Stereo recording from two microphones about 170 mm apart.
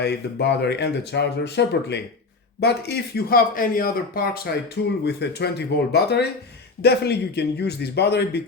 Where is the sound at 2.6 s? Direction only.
75° left (ahead or behind); by 4.2 s 55° left (ahead or behind).